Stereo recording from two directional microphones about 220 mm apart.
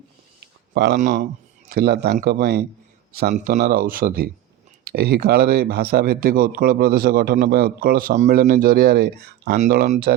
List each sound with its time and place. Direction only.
0.3 s a sound: 50° right (ahead or behind)
0.9 s speech: 35° right (ahead or behind)
1.7 s speech: 45° right (ahead or behind)